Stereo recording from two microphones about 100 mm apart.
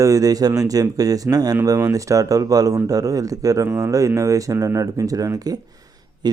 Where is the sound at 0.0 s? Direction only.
35° right (ahead or behind).